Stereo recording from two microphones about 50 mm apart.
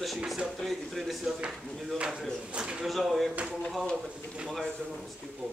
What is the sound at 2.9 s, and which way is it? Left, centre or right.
Speech, centre.